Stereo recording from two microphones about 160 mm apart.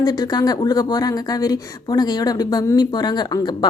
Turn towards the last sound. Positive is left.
turn(degrees=25)  # may be behind; listen again after turning